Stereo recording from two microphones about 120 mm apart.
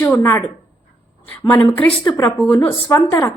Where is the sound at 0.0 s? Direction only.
20° left (ahead or behind).